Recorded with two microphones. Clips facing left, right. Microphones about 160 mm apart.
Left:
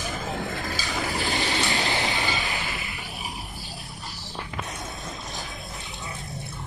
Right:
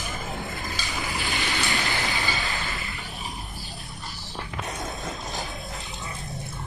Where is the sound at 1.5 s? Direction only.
20° left (ahead or behind).